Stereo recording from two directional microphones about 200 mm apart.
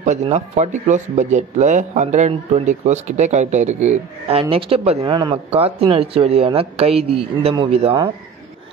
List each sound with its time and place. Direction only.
0.0 s speech: 35° right (ahead or behind)